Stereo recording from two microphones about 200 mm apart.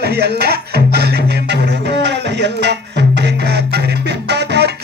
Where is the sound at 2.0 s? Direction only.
55° right (ahead or behind).